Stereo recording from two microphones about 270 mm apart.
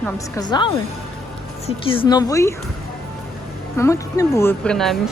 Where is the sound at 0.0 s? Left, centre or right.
Centre.